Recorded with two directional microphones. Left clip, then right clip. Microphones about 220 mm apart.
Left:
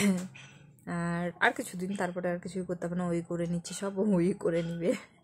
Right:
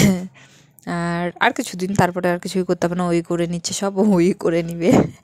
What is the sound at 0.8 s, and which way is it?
Speech, 40° right (ahead or behind).